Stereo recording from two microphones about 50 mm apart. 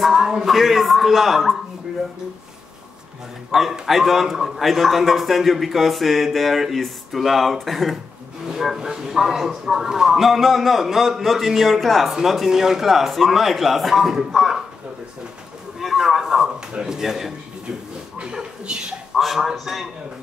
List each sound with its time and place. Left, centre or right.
0.0 s a man's voice: centre
3.7 s a man's voice: centre
15.8 s a man's voice: centre
18.7 s a man's voice: centre
19.1 s a man's voice: centre